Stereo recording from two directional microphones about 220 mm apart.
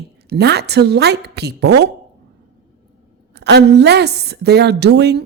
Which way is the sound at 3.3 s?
50° right (ahead or behind).